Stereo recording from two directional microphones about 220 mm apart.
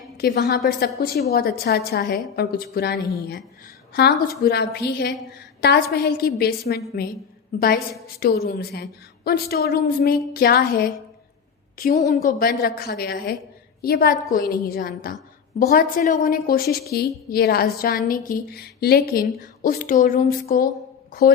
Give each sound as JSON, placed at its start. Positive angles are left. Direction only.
{"t": 0.2, "sound": "a woman's voice", "side_deg": 45}